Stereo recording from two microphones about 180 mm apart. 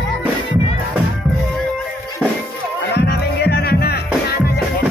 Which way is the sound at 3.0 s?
60° left (ahead or behind).